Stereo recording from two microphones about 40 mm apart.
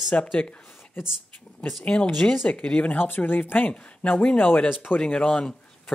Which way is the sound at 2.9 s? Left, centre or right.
Left.